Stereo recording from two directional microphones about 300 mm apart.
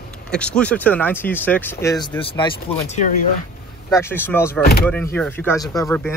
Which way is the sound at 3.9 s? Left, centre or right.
Centre.